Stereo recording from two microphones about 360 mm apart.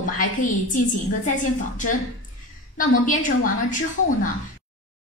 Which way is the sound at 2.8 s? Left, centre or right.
Left.